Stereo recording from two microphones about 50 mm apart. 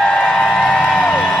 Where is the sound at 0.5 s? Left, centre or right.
Centre.